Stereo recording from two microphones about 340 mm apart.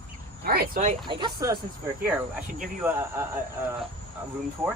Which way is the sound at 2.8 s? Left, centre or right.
Centre.